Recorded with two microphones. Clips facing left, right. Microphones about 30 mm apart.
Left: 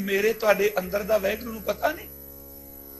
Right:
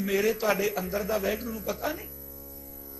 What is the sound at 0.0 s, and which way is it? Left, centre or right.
A man's voice, centre.